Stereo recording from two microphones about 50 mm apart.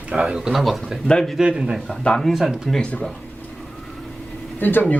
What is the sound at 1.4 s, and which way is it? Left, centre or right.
Speech, centre.